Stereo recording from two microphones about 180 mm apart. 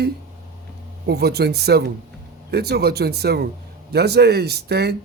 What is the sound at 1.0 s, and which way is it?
Speech, 65° right (ahead or behind).